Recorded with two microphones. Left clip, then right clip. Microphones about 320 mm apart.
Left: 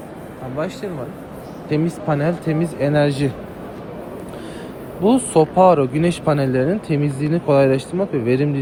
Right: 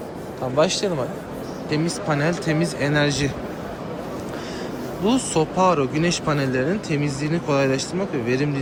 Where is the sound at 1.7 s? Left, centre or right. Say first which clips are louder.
Left 3 dB; centre.